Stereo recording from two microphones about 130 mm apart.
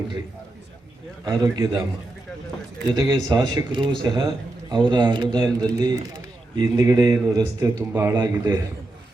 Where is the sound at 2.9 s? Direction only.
30° right (ahead or behind).